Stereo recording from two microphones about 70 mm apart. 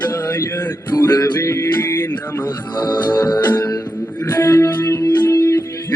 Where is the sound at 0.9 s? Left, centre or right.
Left.